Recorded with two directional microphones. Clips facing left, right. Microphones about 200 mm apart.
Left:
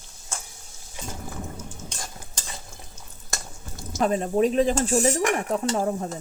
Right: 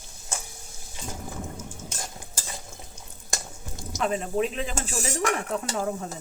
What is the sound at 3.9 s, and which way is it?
Speech, 40° left (ahead or behind).